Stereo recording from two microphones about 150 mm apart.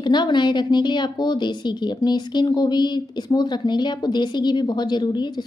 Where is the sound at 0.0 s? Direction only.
30° left (ahead or behind).